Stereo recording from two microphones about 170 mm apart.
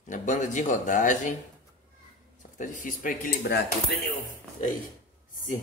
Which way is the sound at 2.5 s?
50° left (ahead or behind).